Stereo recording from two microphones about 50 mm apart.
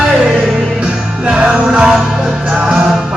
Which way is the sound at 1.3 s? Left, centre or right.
Centre.